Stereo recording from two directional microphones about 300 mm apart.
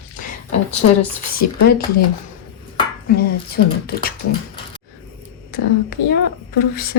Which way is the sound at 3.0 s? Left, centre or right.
Left.